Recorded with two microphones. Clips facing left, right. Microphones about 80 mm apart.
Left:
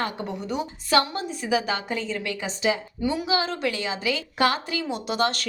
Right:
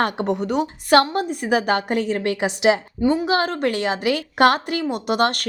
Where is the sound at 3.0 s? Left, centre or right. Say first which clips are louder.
Right 7 dB; right.